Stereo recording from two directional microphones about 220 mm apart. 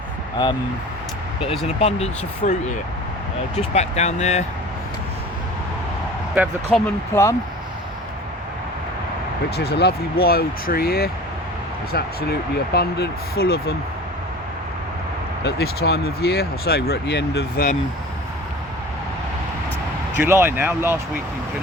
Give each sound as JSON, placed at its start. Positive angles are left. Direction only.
{"t": 1.4, "sound": "speech", "side_deg": 25}
{"t": 3.8, "sound": "speech", "side_deg": 30}
{"t": 6.7, "sound": "speech", "side_deg": 5}
{"t": 9.6, "sound": "speech", "side_deg": 50}
{"t": 15.4, "sound": "speech", "side_deg": 45}
{"t": 20.1, "sound": "speech", "side_deg": -10}